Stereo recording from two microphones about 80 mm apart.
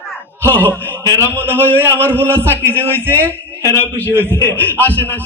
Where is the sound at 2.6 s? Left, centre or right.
Right.